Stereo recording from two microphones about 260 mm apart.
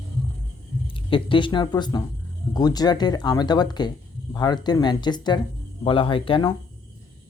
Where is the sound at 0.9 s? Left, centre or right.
Centre.